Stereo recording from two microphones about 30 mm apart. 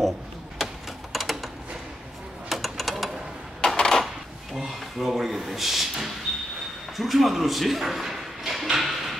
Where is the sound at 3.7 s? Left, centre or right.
Left.